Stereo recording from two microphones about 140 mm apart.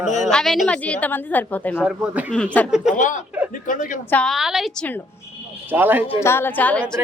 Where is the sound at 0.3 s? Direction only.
5° left (ahead or behind).